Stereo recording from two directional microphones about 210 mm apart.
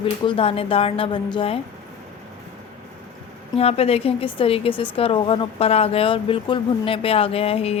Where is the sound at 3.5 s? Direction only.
30° left (ahead or behind).